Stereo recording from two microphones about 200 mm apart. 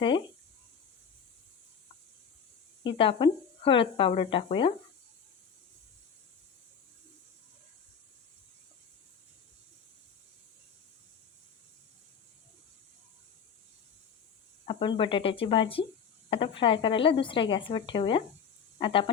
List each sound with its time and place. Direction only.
2.8 s speech: 25° left (ahead or behind)
14.7 s speech: 25° left (ahead or behind)